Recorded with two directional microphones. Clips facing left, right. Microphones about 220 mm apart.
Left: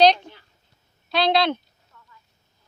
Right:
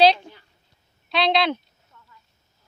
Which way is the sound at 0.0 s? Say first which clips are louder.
Even; 5° right (ahead or behind).